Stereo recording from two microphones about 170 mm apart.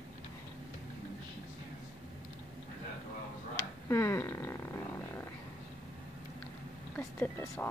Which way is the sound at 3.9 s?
15° left (ahead or behind).